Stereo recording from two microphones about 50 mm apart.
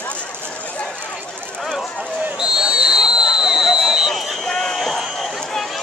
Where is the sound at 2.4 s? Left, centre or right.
Centre.